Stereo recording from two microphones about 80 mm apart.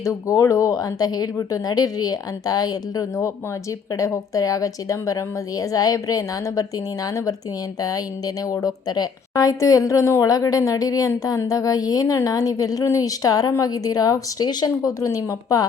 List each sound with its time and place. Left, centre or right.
0.0 s speech: left